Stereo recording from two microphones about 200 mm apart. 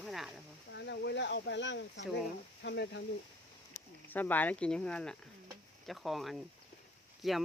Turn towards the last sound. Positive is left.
turn(degrees=0)  # may be behind; listen again after turning